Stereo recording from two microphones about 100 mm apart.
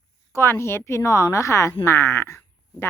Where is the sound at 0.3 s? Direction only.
25° left (ahead or behind).